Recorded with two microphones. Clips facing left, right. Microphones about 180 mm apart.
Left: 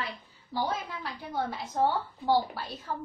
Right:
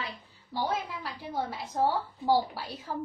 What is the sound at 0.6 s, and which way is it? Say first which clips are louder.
A woman's voice: right 2 dB; 5° right (ahead or behind).